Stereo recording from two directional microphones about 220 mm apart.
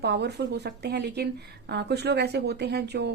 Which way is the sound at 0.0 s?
50° right (ahead or behind).